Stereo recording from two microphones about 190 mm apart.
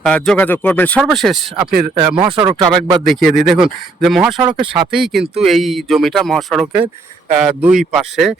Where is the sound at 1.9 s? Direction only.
25° right (ahead or behind).